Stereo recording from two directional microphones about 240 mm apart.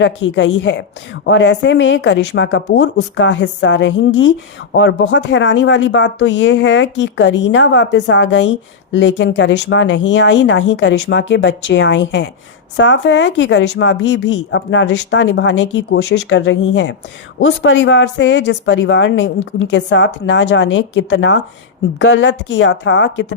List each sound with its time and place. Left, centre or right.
0.0 s speech: left